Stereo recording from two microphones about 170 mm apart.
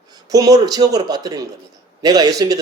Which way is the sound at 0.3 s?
20° right (ahead or behind).